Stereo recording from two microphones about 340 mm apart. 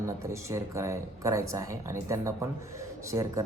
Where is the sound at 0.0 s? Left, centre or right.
Centre.